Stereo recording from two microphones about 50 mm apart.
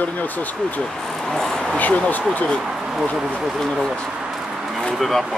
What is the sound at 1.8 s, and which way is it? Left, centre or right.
Speech, left.